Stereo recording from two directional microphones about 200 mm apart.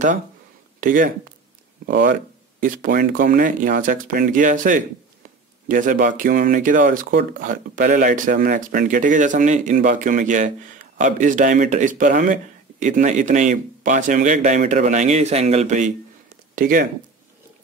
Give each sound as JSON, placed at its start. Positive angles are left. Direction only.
{"t": 0.7, "sound": "speech", "side_deg": -45}